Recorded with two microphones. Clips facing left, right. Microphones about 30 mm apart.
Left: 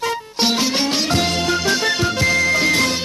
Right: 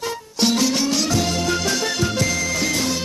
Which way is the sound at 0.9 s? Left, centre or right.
Left.